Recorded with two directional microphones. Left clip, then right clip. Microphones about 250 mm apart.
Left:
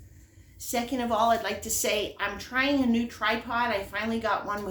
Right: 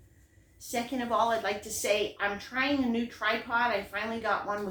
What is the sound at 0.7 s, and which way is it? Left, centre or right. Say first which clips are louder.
A woman's voice: left 2 dB; left.